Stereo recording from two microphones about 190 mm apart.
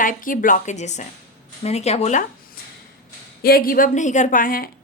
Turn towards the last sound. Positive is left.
turn(degrees=45)  # may be behind; listen again after turning